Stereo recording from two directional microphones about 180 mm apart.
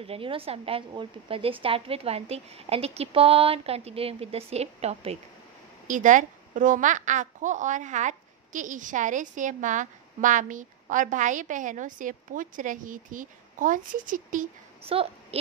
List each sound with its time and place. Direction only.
0.0 s a woman's voice: 30° right (ahead or behind); by 14.5 s 45° right (ahead or behind)
14.8 s a child's voice: 30° right (ahead or behind)